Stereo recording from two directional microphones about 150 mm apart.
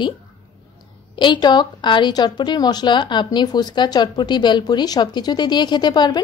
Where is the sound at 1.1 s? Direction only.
30° left (ahead or behind).